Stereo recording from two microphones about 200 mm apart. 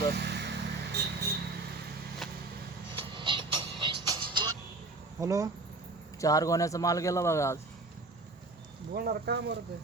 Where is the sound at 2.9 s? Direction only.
25° right (ahead or behind).